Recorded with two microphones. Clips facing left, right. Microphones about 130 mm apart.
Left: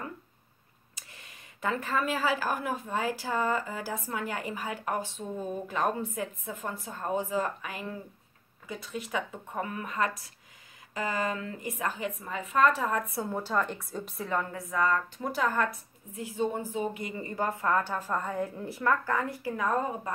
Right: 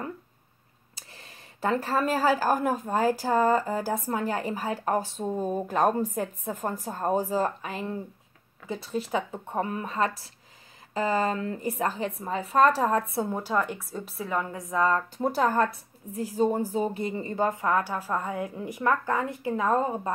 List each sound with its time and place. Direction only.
0.9 s speech: 35° right (ahead or behind)
13.1 s a woman's voice: 20° right (ahead or behind); by 14.4 s centre (ahead or behind)
14.4 s a woman's voice: 20° right (ahead or behind)